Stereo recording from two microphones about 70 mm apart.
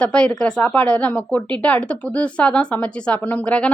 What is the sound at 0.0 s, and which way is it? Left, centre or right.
Speech, centre.